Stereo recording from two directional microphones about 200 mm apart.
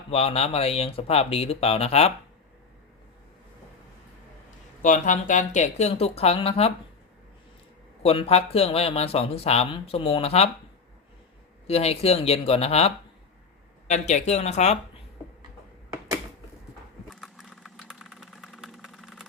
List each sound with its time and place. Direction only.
0.1 s speech: 30° left (ahead or behind)
4.8 s speech: 40° left (ahead or behind)
8.0 s speech: 30° left (ahead or behind)
11.7 s speech: 30° left (ahead or behind)
17.1 s vehicle: centre (ahead or behind)